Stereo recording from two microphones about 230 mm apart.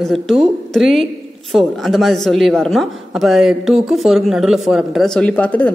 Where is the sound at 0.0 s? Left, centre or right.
Centre.